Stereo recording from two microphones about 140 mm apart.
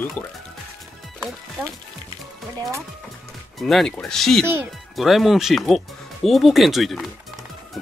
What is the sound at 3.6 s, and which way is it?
Speech, 5° left (ahead or behind).